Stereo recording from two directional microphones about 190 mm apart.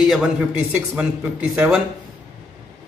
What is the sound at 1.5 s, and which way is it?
Speech, 5° right (ahead or behind).